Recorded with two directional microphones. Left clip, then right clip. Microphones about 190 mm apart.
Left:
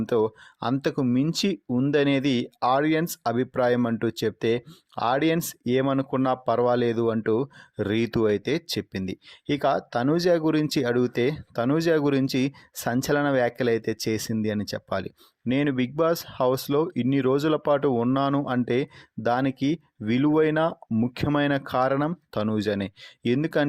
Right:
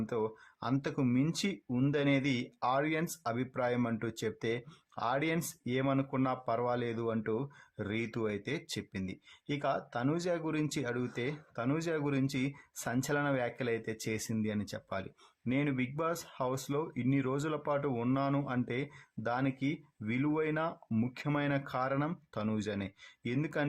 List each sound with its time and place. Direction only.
0.0 s speech: 40° left (ahead or behind)